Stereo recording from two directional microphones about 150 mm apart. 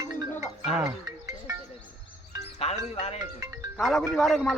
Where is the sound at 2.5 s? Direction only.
45° left (ahead or behind).